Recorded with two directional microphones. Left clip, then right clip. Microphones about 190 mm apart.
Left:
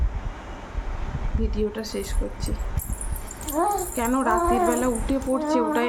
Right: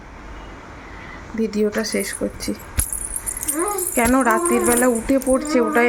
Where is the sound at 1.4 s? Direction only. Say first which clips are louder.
Right 8 dB; 35° right (ahead or behind).